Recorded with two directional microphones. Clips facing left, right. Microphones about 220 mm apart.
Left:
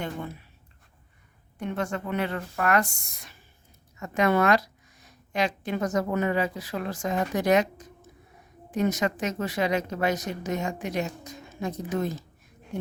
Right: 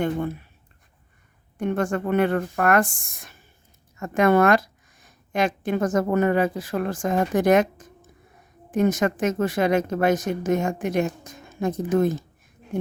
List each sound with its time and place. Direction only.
0.0 s speech: 50° right (ahead or behind)
1.5 s speech: 50° right (ahead or behind)